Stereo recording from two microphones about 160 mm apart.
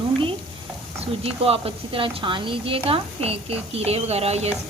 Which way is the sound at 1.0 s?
40° right (ahead or behind).